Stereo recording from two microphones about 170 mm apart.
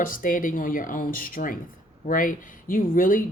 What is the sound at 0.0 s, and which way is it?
Speech, 55° left (ahead or behind).